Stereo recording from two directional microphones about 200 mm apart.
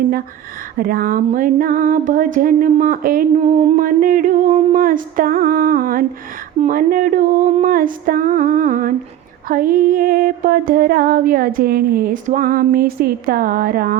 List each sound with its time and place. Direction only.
0.8 s music: 45° right (ahead or behind)